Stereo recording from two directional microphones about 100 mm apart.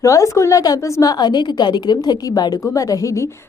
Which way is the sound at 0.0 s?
30° left (ahead or behind).